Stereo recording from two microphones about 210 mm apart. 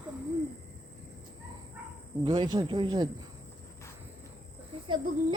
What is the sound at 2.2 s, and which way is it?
Speech, 20° right (ahead or behind).